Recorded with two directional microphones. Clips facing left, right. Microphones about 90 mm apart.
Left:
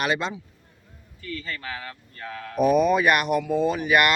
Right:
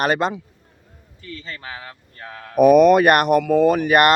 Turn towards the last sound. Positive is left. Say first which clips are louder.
# right 6 dB
turn(degrees=-45)  # may be behind; listen again after turning